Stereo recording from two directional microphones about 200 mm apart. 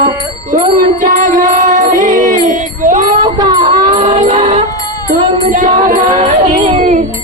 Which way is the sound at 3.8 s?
35° right (ahead or behind).